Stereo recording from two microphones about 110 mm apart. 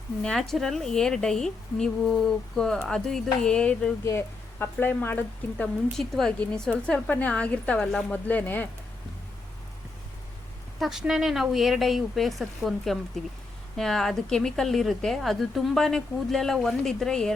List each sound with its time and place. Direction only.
0.2 s a woman's voice: 5° left (ahead or behind)
6.0 s a woman's voice: 5° left (ahead or behind)
10.8 s a woman's voice: 5° right (ahead or behind)